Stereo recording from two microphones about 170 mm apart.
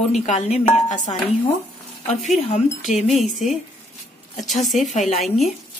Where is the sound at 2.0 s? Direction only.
40° left (ahead or behind).